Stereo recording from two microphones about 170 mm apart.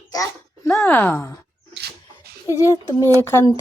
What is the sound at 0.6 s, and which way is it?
Speech, 5° left (ahead or behind).